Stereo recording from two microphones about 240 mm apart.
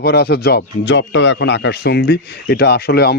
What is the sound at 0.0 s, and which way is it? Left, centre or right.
Speech, left.